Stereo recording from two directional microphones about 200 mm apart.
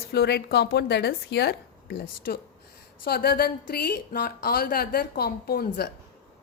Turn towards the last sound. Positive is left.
turn(degrees=50)  # may be behind; listen again after turning